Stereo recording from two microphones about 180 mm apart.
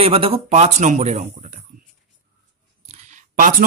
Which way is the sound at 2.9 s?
40° right (ahead or behind).